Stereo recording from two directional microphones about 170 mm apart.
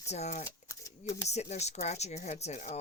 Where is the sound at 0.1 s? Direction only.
40° left (ahead or behind).